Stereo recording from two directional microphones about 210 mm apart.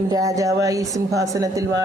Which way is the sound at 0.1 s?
15° right (ahead or behind).